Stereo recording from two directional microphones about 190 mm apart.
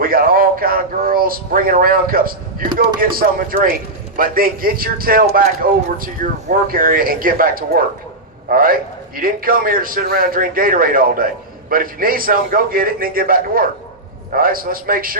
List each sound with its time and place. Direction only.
0.0 s a man's voice: 50° right (ahead or behind)